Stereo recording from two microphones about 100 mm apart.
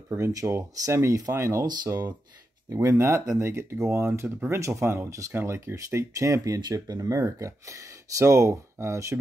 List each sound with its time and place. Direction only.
0.1 s speech: 30° right (ahead or behind)
1.7 s speech: 45° right (ahead or behind)
2.7 s speech: 30° right (ahead or behind)